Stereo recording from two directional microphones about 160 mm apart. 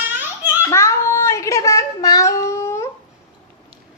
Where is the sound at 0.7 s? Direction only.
15° left (ahead or behind).